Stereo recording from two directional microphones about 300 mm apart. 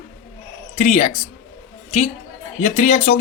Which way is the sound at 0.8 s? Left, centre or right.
Left.